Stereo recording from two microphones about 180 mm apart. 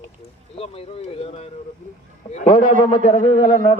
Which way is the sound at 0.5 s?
30° left (ahead or behind).